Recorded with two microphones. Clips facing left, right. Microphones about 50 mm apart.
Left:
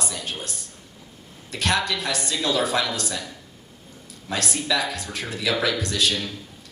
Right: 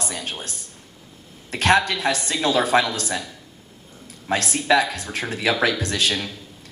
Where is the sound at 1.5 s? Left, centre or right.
Right.